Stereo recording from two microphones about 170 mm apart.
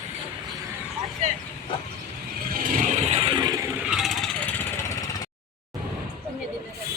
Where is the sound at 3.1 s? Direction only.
30° right (ahead or behind).